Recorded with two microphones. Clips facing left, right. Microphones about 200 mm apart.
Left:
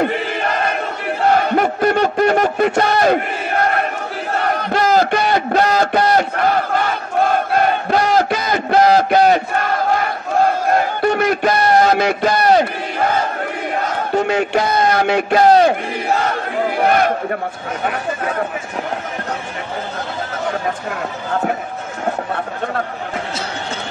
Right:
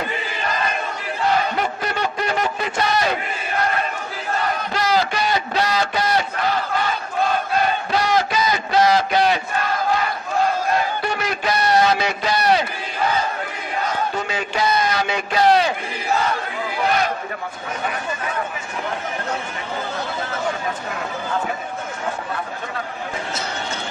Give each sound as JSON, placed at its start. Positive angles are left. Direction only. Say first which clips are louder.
{"t": 0.0, "sound": "crowd", "louder": "left 8 dB", "side_deg": 60}
{"t": 1.2, "sound": "a sound", "louder": "left 6 dB", "side_deg": 55}
{"t": 13.7, "sound": "a man's voice", "louder": "left 4 dB", "side_deg": 50}
{"t": 15.6, "sound": "battle cry", "louder": "left 8 dB", "side_deg": 55}
{"t": 17.8, "sound": "speech", "louder": "left 6 dB", "side_deg": 55}